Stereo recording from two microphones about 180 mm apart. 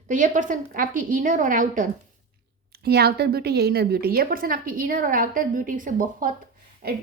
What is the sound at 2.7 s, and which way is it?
A woman's voice, 60° right (ahead or behind).